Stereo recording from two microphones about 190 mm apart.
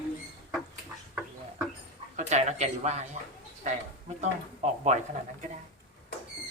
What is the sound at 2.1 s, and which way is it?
Speech, 40° right (ahead or behind).